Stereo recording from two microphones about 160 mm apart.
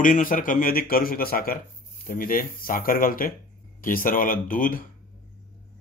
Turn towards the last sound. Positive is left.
turn(degrees=60)  # may be behind; listen again after turning